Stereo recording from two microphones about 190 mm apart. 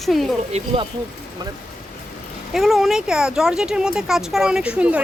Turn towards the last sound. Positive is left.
turn(degrees=-5)  # may be behind; listen again after turning